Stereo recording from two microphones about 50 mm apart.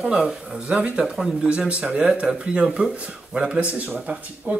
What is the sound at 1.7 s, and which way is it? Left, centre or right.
Speech, right.